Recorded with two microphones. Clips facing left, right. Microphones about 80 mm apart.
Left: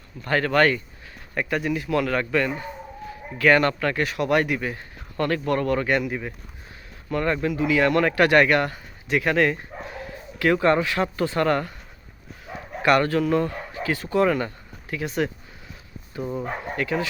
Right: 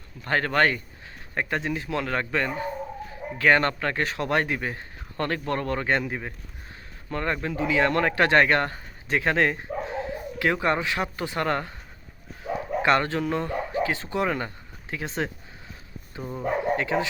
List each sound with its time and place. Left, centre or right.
0.3 s speech: right
12.8 s speech: right